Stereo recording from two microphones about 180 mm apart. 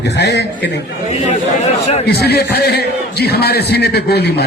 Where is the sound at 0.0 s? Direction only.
70° left (ahead or behind).